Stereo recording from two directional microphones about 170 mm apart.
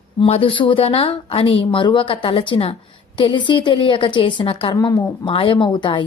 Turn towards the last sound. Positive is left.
turn(degrees=30)  # may be behind; listen again after turning